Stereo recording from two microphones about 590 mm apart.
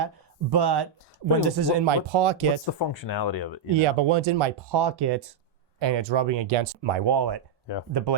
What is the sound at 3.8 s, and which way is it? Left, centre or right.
Speech, right.